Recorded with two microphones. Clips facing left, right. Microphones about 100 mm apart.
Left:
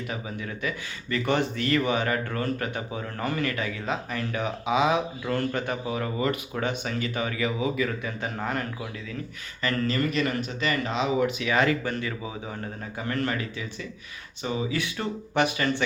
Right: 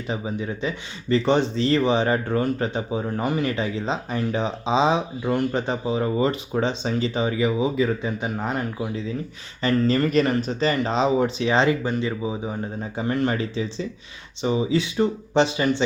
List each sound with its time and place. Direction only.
0.1 s speech: 25° right (ahead or behind)